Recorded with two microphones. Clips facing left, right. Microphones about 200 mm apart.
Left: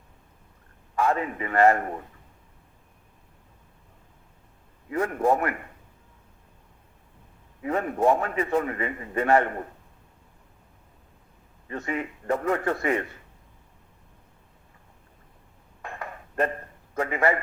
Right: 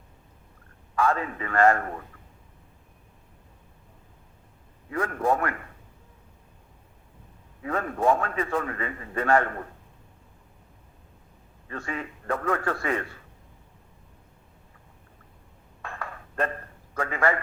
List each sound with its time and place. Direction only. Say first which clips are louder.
0.9 s a man's voice: left 1 dB; 20° left (ahead or behind)
5.1 s a man's voice: left 2 dB; 15° left (ahead or behind)
7.6 s a man's voice: left 2 dB; 20° left (ahead or behind)
11.7 s a man's voice: left 4 dB; 20° left (ahead or behind)
15.8 s a sound: left 1 dB; 15° left (ahead or behind)